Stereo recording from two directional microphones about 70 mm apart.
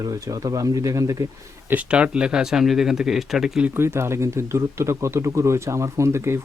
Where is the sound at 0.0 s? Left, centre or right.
Right.